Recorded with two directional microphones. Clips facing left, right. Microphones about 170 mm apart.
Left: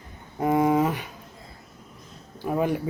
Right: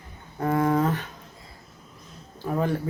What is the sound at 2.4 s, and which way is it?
Speech, 15° left (ahead or behind).